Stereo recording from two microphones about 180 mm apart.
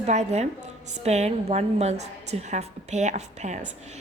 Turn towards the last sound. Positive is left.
turn(degrees=-40)  # may be behind; listen again after turning